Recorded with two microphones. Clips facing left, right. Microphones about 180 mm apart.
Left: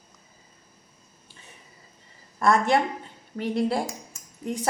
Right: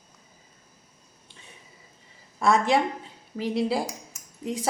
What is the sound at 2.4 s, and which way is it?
A woman's voice, centre (ahead or behind).